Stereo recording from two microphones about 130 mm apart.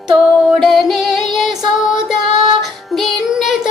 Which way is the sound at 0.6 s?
Centre (ahead or behind).